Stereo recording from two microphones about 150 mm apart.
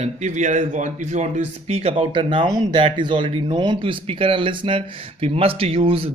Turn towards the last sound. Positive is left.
turn(degrees=-40)  # may be behind; listen again after turning